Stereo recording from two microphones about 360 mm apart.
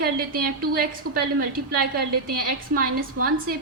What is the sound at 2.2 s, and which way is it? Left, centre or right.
A woman's voice, right.